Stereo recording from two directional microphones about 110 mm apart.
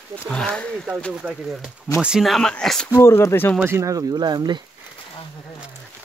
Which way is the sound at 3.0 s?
25° left (ahead or behind).